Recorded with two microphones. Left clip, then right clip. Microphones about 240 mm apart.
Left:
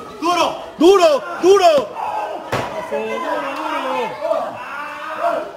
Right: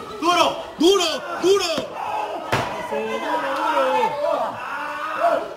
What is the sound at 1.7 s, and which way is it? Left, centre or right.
Battle cry, centre.